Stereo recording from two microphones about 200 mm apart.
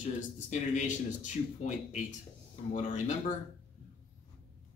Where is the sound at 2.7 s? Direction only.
35° left (ahead or behind).